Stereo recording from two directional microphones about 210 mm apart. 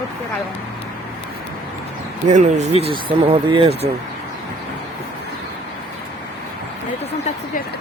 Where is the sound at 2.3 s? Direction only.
35° right (ahead or behind).